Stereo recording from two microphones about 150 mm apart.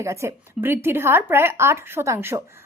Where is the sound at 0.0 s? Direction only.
20° right (ahead or behind).